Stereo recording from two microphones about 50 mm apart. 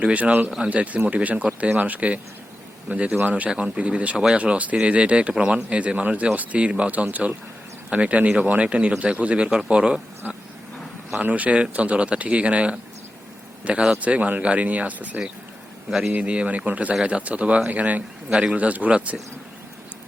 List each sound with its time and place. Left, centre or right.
0.0 s speech: right
15.9 s a man's voice: centre
16.2 s speech: right